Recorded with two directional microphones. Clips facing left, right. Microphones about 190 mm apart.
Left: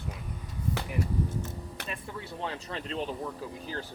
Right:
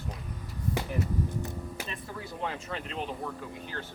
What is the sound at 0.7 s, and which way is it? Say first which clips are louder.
Speech: right 1 dB; 15° right (ahead or behind).